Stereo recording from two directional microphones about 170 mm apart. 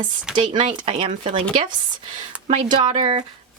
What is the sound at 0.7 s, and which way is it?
Speech, 35° right (ahead or behind).